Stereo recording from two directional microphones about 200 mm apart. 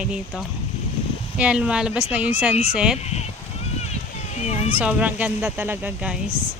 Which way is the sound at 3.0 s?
30° left (ahead or behind).